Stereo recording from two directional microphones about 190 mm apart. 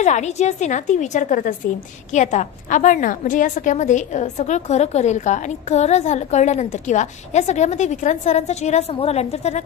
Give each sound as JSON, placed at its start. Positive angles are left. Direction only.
{"t": 0.0, "sound": "a woman's voice", "side_deg": 40}